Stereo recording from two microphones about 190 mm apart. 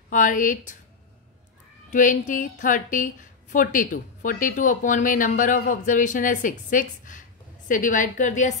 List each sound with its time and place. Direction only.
0.1 s a woman's voice: 45° left (ahead or behind)
1.9 s a woman's voice: 40° left (ahead or behind)